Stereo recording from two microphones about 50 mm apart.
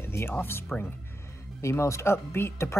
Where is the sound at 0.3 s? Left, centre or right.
Left.